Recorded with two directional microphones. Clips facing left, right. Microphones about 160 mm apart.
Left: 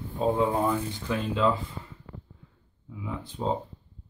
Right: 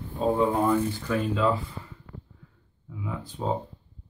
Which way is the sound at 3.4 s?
10° left (ahead or behind).